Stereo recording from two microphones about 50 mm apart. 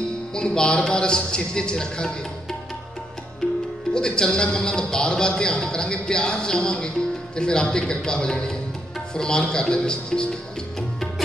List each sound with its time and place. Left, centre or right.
0.3 s a man's voice: centre
3.9 s a man's voice: centre
10.8 s music: centre